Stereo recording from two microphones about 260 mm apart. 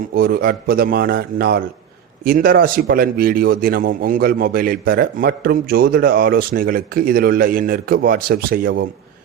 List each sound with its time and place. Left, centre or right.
0.1 s a man's voice: right